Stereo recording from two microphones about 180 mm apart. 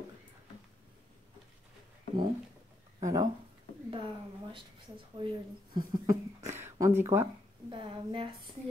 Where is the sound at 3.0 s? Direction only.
20° right (ahead or behind).